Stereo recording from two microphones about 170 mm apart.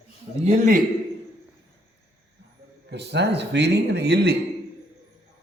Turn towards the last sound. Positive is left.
turn(degrees=-85)